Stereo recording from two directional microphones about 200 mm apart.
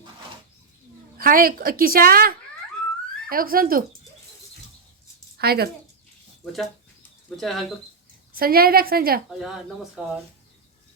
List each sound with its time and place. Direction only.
1.2 s a woman's voice: 45° right (ahead or behind)
5.4 s speech: 50° right (ahead or behind)
6.4 s speech: centre (ahead or behind)
8.4 s a woman's voice: 50° right (ahead or behind)
9.4 s speech: centre (ahead or behind)